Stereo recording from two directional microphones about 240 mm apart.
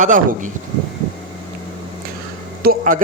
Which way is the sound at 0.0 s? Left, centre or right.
Right.